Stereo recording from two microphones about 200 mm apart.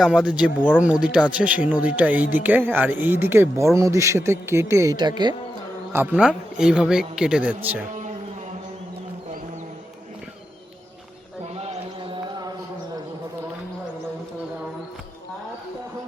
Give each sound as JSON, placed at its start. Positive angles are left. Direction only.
{"t": 0.0, "sound": "a man's voice", "side_deg": -5}
{"t": 5.9, "sound": "a man's voice", "side_deg": -10}
{"t": 11.4, "sound": "a sound", "side_deg": -30}
{"t": 12.1, "sound": "music", "side_deg": -20}